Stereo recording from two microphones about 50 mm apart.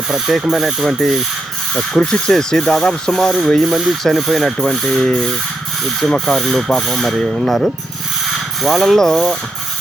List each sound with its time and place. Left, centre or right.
0.1 s speech: centre
2.0 s speech: centre
8.6 s speech: centre